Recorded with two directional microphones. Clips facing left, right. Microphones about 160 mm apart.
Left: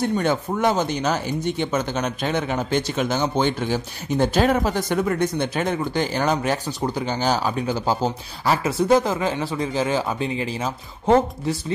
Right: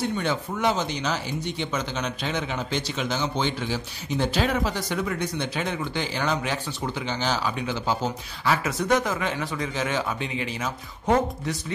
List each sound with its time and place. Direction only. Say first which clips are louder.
0.0 s speech: left 5 dB; 50° left (ahead or behind); by 11.5 s 30° left (ahead or behind)